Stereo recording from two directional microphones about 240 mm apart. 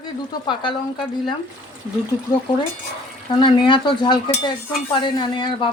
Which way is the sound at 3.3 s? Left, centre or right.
Centre.